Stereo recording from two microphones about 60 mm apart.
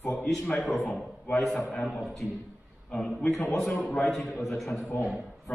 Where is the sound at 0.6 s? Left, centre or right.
Centre.